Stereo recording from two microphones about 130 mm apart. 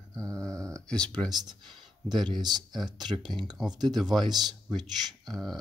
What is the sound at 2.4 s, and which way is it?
Speech, 35° right (ahead or behind).